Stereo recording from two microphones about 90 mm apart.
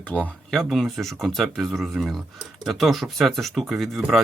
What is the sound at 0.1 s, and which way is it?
Speech, 15° left (ahead or behind).